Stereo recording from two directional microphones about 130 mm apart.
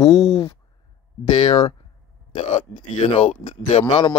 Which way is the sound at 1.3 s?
45° left (ahead or behind).